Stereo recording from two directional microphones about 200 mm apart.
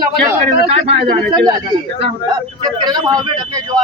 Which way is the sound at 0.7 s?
30° right (ahead or behind).